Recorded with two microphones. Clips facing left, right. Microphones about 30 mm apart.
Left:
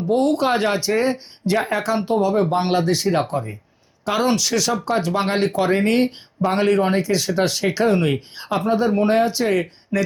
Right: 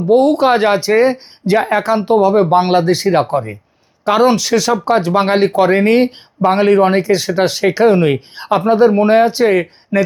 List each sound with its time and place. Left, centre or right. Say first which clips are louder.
0.2 s speech: right 7 dB; centre
5.0 s speech: right 7 dB; right